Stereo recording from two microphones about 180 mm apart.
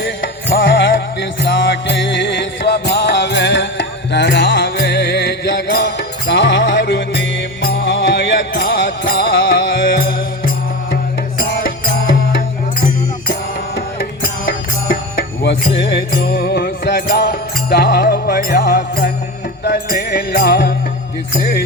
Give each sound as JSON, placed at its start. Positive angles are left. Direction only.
{"t": 0.5, "sound": "music", "side_deg": 90}
{"t": 2.4, "sound": "music", "side_deg": 75}
{"t": 15.4, "sound": "music", "side_deg": 70}